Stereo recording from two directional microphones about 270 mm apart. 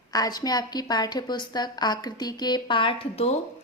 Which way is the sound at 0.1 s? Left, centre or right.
Centre.